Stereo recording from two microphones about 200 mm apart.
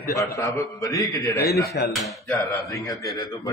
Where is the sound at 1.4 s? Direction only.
50° left (ahead or behind).